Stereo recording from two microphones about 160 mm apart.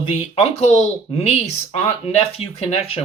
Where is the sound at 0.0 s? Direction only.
40° left (ahead or behind).